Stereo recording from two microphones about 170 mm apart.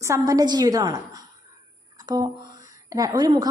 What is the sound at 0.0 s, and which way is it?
A woman's voice, 20° right (ahead or behind).